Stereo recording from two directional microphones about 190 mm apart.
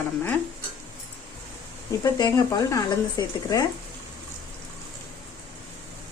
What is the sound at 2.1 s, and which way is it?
Speech, 20° left (ahead or behind).